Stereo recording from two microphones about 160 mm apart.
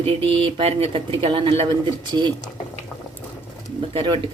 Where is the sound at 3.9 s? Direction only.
30° right (ahead or behind).